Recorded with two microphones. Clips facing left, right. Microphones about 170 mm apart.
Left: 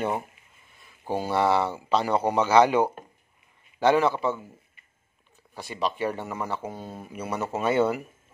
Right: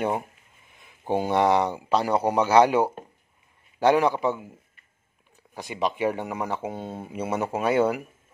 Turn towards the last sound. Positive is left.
turn(degrees=-10)  # may be behind; listen again after turning